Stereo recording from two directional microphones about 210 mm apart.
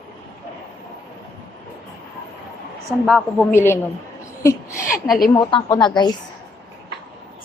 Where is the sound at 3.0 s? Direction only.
5° left (ahead or behind).